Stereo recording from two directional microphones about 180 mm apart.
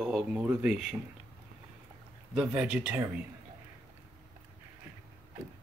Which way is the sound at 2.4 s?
5° right (ahead or behind).